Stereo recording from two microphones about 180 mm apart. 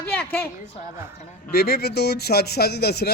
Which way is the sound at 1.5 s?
60° left (ahead or behind).